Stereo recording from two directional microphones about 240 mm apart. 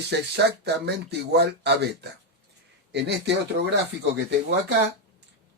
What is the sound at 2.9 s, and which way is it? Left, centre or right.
Speech, right.